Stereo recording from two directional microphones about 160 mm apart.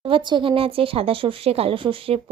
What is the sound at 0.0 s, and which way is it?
Speech, 30° right (ahead or behind).